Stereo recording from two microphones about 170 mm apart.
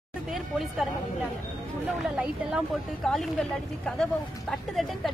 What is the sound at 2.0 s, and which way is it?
Speech, 5° right (ahead or behind).